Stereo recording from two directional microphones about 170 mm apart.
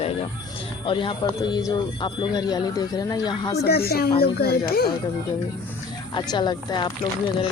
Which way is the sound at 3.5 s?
65° left (ahead or behind).